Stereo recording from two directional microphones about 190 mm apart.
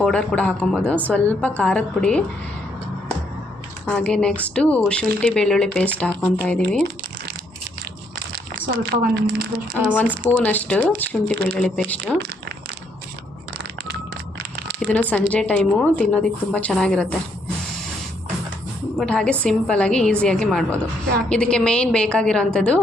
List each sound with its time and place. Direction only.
0.0 s speech: 5° left (ahead or behind)
3.8 s speech: 5° left (ahead or behind)
8.5 s a woman's voice: 50° right (ahead or behind)
10.3 s speech: 5° left (ahead or behind)
14.8 s speech: 5° left (ahead or behind)
18.9 s speech: 5° left (ahead or behind)